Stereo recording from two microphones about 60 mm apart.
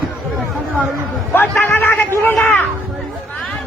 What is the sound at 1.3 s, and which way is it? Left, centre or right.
Speech, left.